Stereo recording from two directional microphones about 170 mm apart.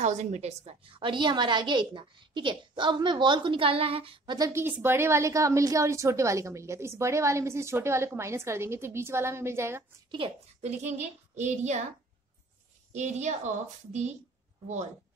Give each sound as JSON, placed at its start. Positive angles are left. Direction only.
{"t": 0.0, "sound": "a woman's voice", "side_deg": -40}
{"t": 4.5, "sound": "a woman's voice", "side_deg": -15}
{"t": 10.1, "sound": "a child's voice", "side_deg": -35}
{"t": 12.9, "sound": "a child's voice", "side_deg": -45}